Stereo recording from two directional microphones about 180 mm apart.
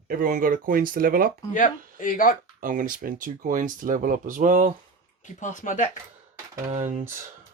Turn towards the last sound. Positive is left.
turn(degrees=-40)  # may be behind; listen again after turning